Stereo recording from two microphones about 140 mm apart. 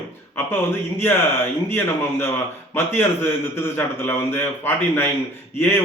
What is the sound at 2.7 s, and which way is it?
A man's voice, 15° left (ahead or behind).